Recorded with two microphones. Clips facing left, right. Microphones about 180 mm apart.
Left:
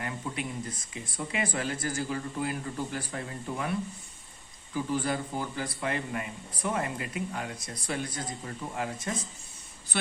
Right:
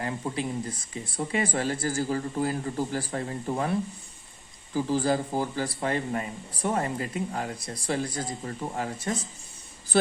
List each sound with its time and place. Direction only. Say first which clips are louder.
0.0 s a man's voice: right 5 dB; 30° right (ahead or behind)
4.7 s a man's voice: right 5 dB; 35° right (ahead or behind)